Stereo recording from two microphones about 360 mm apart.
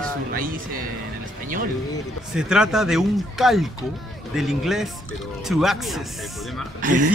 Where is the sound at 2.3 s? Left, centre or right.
Centre.